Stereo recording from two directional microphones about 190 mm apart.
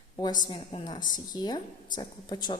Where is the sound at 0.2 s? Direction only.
20° left (ahead or behind).